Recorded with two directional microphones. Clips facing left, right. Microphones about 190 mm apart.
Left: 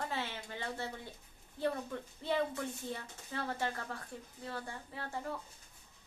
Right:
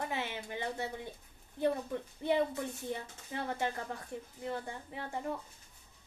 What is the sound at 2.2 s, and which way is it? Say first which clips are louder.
A woman's voice: right 3 dB; 15° right (ahead or behind).